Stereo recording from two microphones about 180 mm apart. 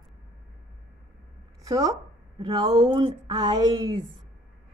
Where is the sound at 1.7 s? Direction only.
20° right (ahead or behind).